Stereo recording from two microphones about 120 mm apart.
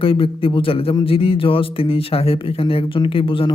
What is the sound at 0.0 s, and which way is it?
Speech, 50° left (ahead or behind).